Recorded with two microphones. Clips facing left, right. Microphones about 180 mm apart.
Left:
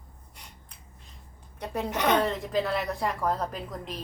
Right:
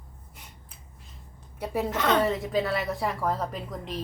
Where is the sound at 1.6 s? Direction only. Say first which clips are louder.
Right 3 dB; 5° right (ahead or behind).